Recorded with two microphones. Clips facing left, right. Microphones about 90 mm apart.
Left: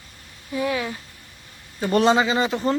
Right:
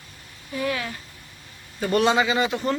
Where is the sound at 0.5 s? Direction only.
15° left (ahead or behind).